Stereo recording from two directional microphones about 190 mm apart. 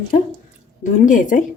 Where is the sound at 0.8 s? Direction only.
40° left (ahead or behind).